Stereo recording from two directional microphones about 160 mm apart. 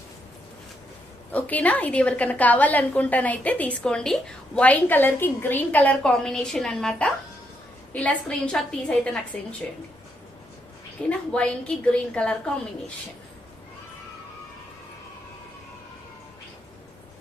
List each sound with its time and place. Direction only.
1.3 s a woman's voice: 10° left (ahead or behind)
11.1 s a woman's voice: 5° left (ahead or behind)